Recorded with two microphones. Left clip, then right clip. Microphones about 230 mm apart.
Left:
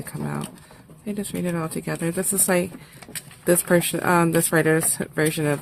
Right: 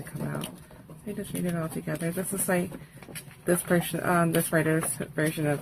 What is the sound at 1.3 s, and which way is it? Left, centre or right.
Speech, left.